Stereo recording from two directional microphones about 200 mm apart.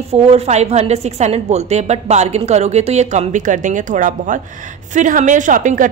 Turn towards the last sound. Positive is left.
turn(degrees=-40)  # may be behind; listen again after turning